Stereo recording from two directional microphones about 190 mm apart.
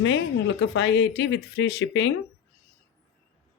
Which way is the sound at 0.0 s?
75° left (ahead or behind).